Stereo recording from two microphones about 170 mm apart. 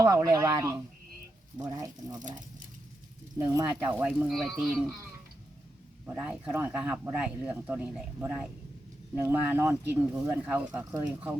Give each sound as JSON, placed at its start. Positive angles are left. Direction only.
{"t": 0.0, "sound": "speech", "side_deg": -20}
{"t": 3.3, "sound": "speech", "side_deg": -20}
{"t": 6.1, "sound": "speech", "side_deg": -10}